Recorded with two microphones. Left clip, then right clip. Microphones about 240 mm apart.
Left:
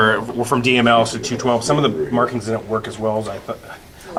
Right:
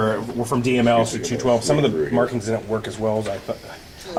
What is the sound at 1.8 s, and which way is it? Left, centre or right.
Speech, left.